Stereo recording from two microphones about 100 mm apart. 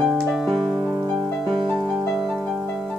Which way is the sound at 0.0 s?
Centre (ahead or behind).